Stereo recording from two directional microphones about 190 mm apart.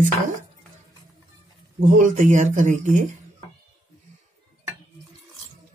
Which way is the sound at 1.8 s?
40° right (ahead or behind).